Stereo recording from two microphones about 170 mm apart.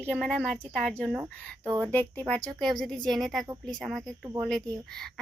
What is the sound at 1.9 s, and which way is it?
A child's voice, 10° left (ahead or behind).